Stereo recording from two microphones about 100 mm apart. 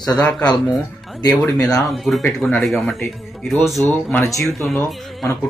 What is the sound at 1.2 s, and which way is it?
Speech, 40° left (ahead or behind).